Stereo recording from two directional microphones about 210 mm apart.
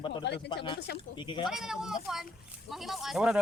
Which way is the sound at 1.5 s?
Centre (ahead or behind).